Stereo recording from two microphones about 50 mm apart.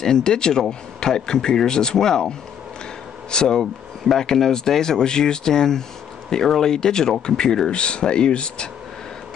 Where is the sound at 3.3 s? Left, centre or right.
Centre.